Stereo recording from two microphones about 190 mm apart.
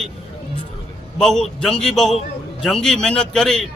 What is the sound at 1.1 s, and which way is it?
Speech, centre (ahead or behind).